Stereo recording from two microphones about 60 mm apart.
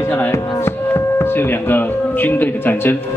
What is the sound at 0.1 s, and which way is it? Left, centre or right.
Music, left.